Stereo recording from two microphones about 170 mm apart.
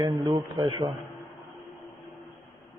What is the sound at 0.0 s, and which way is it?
Speech, 25° right (ahead or behind).